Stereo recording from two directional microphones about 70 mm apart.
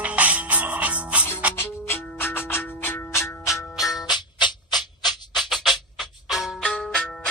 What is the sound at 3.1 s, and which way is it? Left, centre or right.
Music, left.